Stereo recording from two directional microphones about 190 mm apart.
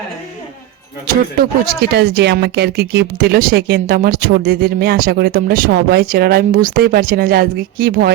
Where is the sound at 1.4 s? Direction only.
55° right (ahead or behind).